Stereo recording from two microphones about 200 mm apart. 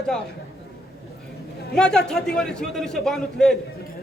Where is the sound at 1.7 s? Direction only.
5° left (ahead or behind).